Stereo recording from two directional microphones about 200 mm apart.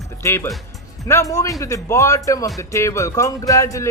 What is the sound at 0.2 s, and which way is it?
Speech, 15° left (ahead or behind).